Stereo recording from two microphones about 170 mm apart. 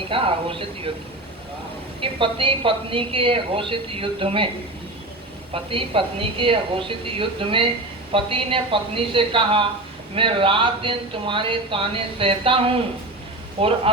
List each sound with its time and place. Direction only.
0.1 s speech: 30° right (ahead or behind)
2.0 s speech: 30° right (ahead or behind)
5.7 s speech: 30° right (ahead or behind)